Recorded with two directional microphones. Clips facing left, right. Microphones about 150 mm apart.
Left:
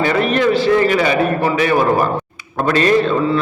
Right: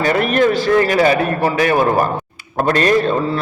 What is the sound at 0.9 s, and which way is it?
Speech, 40° right (ahead or behind).